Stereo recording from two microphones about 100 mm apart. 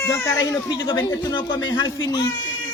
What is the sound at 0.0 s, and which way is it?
Speech, 25° left (ahead or behind).